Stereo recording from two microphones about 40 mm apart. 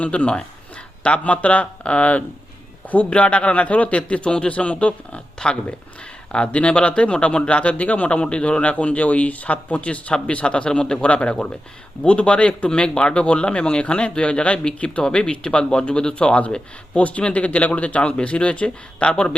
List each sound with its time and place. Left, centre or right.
0.0 s a man's voice: left
10.7 s speech: centre
11.0 s a man's voice: left